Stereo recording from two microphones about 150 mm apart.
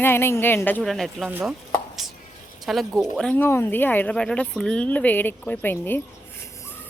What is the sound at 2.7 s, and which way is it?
Speech, centre (ahead or behind).